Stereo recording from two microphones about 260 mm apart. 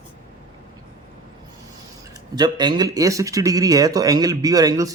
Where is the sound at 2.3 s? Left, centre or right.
Centre.